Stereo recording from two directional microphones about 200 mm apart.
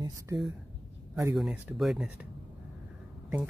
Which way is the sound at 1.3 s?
5° right (ahead or behind).